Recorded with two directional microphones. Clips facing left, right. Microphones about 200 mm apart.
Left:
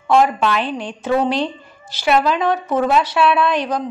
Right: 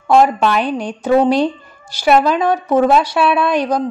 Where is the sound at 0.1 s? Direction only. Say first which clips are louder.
Right 3 dB; 45° right (ahead or behind).